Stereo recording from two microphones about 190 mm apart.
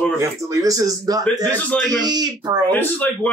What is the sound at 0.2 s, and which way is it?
Speech, 15° right (ahead or behind).